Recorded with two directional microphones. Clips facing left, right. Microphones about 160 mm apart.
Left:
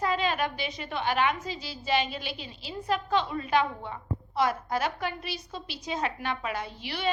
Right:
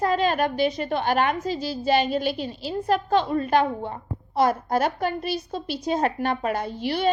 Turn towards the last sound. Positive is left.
turn(degrees=-45)  # may be behind; listen again after turning